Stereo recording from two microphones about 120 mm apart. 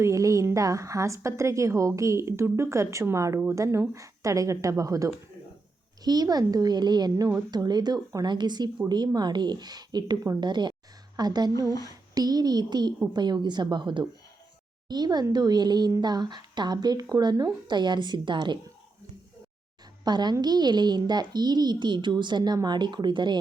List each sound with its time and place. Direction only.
0.0 s a woman's voice: 25° right (ahead or behind)
20.1 s a woman's voice: 35° right (ahead or behind)